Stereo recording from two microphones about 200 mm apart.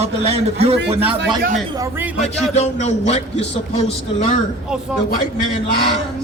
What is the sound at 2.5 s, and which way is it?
Speech, 35° left (ahead or behind).